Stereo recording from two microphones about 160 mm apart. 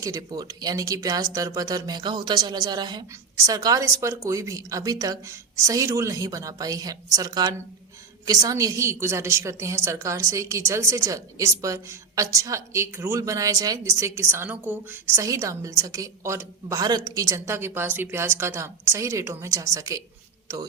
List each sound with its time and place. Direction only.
0.0 s a woman's voice: 25° right (ahead or behind)